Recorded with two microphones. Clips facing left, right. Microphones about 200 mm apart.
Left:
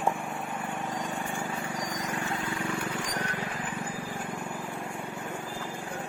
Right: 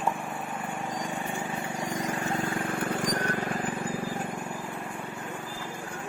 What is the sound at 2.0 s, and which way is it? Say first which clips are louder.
Vehicle: right 3 dB; 35° right (ahead or behind).